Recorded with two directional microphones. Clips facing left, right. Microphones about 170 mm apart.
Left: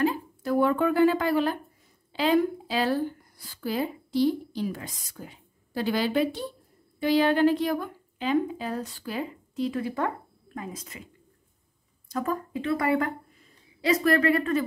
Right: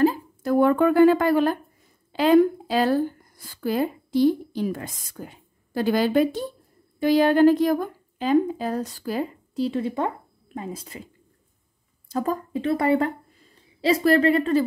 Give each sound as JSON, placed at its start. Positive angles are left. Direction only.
{"t": 0.0, "sound": "a sound", "side_deg": -45}
{"t": 2.1, "sound": "a woman's voice", "side_deg": -50}
{"t": 9.7, "sound": "a woman's voice", "side_deg": -25}
{"t": 12.1, "sound": "a woman's voice", "side_deg": -30}